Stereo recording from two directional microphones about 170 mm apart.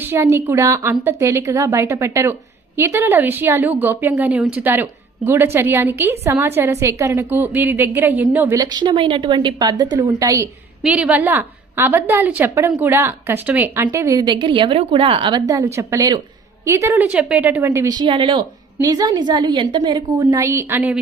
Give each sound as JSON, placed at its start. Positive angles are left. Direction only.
{"t": 0.0, "sound": "a woman's voice", "side_deg": -15}
{"t": 10.8, "sound": "a woman's voice", "side_deg": -5}